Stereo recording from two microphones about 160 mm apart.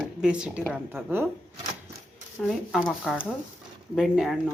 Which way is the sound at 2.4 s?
Centre (ahead or behind).